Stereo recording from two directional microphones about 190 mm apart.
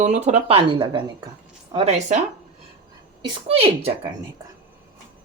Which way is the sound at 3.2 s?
30° right (ahead or behind).